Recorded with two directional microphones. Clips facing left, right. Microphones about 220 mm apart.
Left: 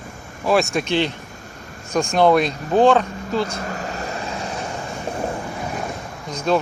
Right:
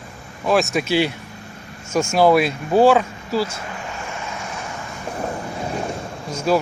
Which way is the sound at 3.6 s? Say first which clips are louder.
Left 4 dB; 45° left (ahead or behind).